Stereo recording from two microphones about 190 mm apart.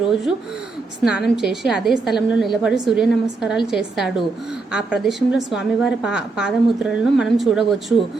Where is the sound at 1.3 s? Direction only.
Centre (ahead or behind).